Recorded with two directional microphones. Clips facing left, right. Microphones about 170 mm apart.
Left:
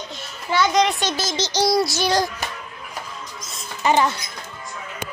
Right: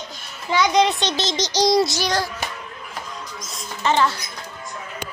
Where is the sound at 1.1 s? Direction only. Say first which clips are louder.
Right 1 dB; 15° right (ahead or behind).